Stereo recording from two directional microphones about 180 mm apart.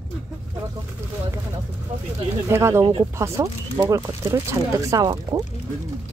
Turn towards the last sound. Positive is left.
turn(degrees=-20)  # may be behind; listen again after turning